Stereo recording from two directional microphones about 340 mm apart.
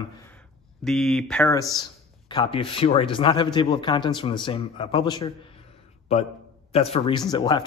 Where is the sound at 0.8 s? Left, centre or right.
Centre.